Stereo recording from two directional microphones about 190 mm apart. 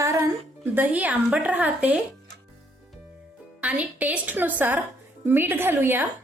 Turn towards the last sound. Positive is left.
turn(degrees=-10)  # may be behind; listen again after turning